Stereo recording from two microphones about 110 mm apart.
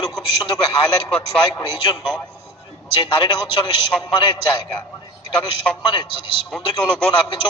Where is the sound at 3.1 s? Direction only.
40° left (ahead or behind).